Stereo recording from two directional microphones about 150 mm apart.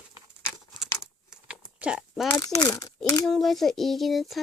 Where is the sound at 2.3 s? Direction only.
25° left (ahead or behind).